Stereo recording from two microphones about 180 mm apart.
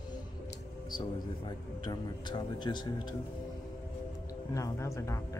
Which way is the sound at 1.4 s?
25° left (ahead or behind).